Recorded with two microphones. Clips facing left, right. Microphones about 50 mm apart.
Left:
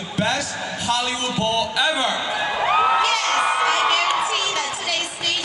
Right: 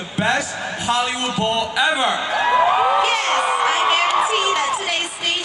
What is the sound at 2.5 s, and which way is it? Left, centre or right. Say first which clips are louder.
Crowd: right 2 dB; centre.